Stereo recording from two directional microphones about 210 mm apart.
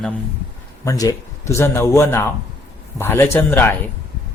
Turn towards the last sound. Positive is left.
turn(degrees=10)  # may be behind; listen again after turning